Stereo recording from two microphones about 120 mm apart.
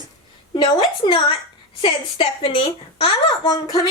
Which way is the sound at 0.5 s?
40° left (ahead or behind).